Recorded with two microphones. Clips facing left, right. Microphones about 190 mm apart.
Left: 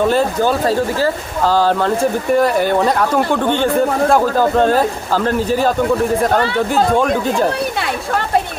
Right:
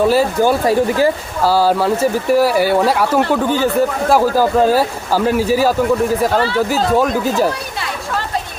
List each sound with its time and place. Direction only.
0.1 s speech: 10° right (ahead or behind)